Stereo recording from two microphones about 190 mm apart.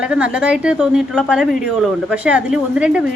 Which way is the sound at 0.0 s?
5° right (ahead or behind).